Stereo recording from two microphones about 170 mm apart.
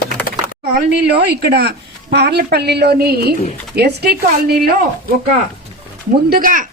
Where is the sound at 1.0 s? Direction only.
70° right (ahead or behind).